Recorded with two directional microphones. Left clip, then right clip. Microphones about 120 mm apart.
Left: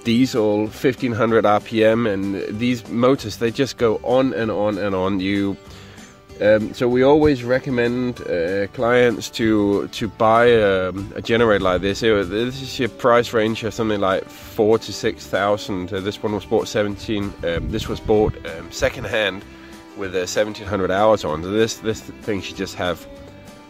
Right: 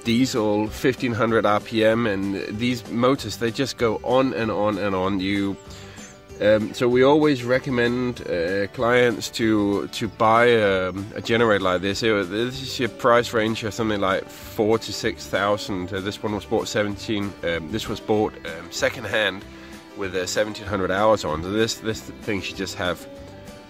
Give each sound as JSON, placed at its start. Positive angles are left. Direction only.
{"t": 0.0, "sound": "speech", "side_deg": 50}
{"t": 0.4, "sound": "speech", "side_deg": 35}
{"t": 2.1, "sound": "speech", "side_deg": 35}
{"t": 3.9, "sound": "speech", "side_deg": 35}
{"t": 6.7, "sound": "speech", "side_deg": 35}